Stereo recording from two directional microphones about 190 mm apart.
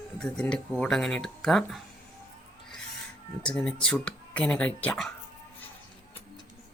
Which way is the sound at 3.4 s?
5° left (ahead or behind).